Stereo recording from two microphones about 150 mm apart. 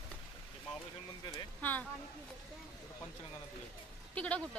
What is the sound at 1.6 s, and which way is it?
Speech, 10° left (ahead or behind).